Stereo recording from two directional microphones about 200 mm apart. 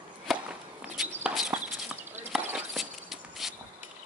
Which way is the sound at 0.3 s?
5° right (ahead or behind).